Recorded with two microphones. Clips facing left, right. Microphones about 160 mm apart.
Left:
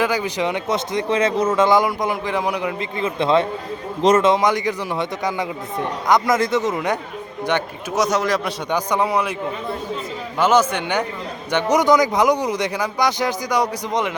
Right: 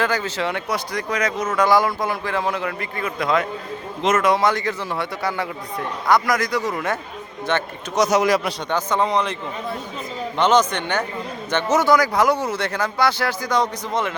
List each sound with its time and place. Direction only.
0.0 s speech: 10° left (ahead or behind)
7.9 s a man's voice: centre (ahead or behind)
8.7 s speech: 10° left (ahead or behind)
10.3 s speech: 5° left (ahead or behind)